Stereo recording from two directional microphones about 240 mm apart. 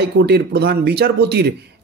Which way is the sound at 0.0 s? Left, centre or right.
Right.